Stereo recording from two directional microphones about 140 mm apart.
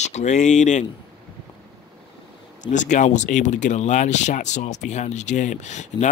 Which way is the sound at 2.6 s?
60° left (ahead or behind).